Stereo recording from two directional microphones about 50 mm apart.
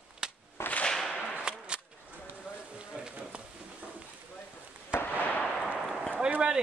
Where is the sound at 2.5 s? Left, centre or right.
Centre.